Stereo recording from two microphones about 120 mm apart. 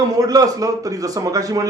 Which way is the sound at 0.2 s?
30° right (ahead or behind).